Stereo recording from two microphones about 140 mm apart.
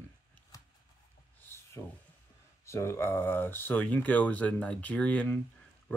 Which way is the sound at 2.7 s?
20° left (ahead or behind).